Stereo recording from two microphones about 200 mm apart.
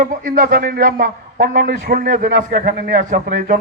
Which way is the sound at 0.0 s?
45° right (ahead or behind).